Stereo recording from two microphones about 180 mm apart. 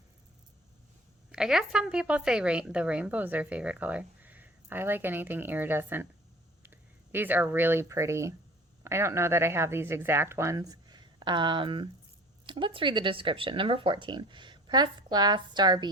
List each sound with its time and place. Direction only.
1.3 s speech: 5° right (ahead or behind); by 15.9 s 25° right (ahead or behind)